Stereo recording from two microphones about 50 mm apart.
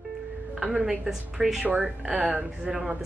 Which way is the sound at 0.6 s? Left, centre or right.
Centre.